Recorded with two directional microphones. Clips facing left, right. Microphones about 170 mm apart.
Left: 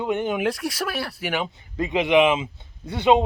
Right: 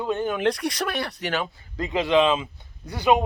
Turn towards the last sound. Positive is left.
turn(degrees=25)  # may be behind; listen again after turning